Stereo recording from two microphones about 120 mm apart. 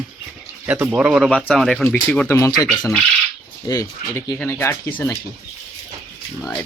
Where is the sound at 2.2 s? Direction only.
25° left (ahead or behind).